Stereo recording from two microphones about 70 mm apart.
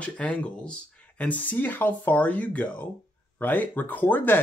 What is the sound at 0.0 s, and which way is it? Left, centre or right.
Speech, centre.